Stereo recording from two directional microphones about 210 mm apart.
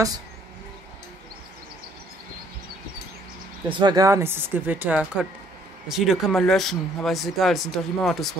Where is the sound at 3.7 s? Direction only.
20° right (ahead or behind); by 8.2 s centre (ahead or behind).